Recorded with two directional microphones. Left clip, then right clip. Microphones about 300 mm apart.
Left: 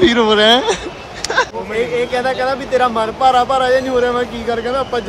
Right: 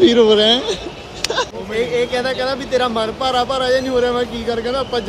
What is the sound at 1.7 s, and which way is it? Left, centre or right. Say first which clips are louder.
Speech: left 1 dB; centre.